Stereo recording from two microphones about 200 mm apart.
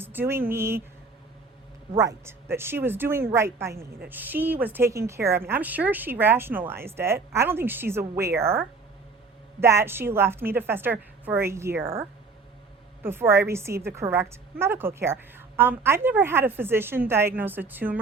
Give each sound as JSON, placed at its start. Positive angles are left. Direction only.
{"t": 0.0, "sound": "a woman's voice", "side_deg": -10}
{"t": 2.0, "sound": "a woman's voice", "side_deg": -15}